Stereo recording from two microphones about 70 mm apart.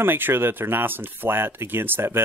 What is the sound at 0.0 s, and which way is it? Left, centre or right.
Speech, right.